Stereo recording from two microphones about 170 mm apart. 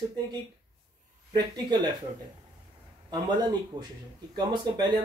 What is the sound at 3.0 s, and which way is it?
Speech, 25° right (ahead or behind).